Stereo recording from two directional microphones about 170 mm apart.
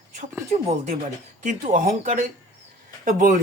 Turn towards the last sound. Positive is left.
turn(degrees=-50)  # may be behind; listen again after turning